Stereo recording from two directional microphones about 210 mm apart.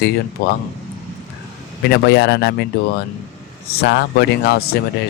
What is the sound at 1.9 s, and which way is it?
Speech, 50° left (ahead or behind).